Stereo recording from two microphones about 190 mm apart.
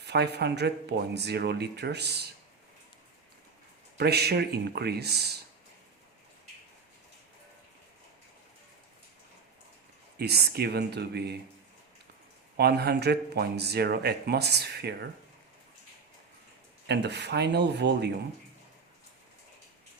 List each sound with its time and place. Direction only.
0.0 s speech: 60° right (ahead or behind)
3.9 s speech: 60° right (ahead or behind)
10.2 s speech: 55° right (ahead or behind)
12.5 s speech: 55° right (ahead or behind)
16.8 s speech: 60° right (ahead or behind)